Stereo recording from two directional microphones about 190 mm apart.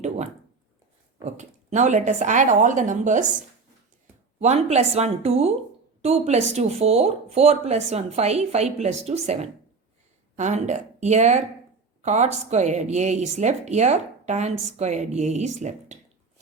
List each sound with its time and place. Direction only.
1.2 s speech: 40° right (ahead or behind)
4.4 s speech: 35° right (ahead or behind)